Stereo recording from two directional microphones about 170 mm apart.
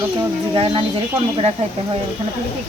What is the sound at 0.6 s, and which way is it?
Speech, 30° right (ahead or behind).